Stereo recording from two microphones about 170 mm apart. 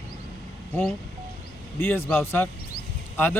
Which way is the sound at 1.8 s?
15° left (ahead or behind).